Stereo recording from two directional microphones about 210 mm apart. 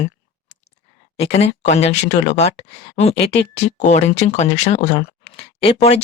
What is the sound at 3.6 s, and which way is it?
Speech, 35° left (ahead or behind).